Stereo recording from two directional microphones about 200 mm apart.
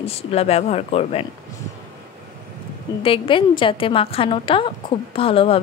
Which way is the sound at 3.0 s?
25° left (ahead or behind).